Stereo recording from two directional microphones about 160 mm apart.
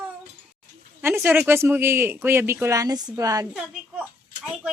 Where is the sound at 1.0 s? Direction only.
15° right (ahead or behind).